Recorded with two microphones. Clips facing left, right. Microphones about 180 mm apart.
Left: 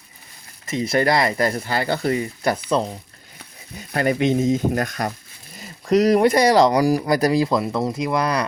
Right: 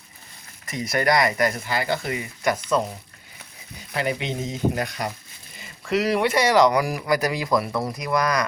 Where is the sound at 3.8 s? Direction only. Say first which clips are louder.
Left 7 dB; 50° left (ahead or behind); by 8.4 s 25° left (ahead or behind).